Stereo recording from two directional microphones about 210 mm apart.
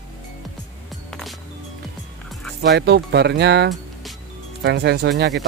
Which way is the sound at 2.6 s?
50° right (ahead or behind).